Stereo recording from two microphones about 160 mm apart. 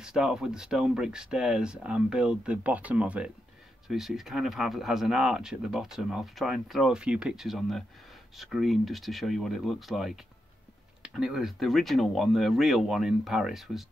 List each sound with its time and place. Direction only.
0.0 s speech: 5° right (ahead or behind)
11.1 s speech: 5° right (ahead or behind)